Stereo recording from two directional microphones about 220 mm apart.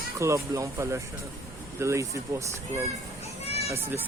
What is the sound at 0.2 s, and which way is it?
Speech, 15° right (ahead or behind).